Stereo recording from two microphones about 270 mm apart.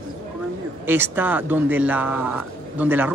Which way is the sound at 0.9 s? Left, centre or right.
Centre.